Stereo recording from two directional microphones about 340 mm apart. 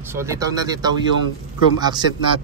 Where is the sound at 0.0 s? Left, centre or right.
Centre.